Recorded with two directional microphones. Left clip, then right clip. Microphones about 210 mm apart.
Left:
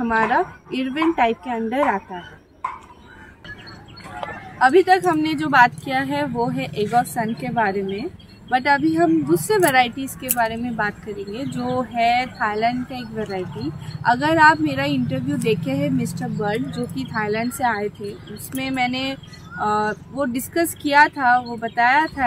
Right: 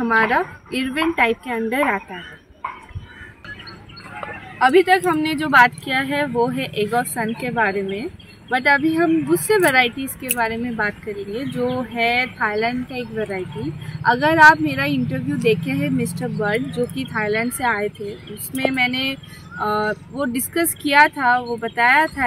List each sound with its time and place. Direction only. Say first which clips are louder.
0.2 s speech: right 1 dB; 15° left (ahead or behind)
4.6 s speech: even; 10° left (ahead or behind)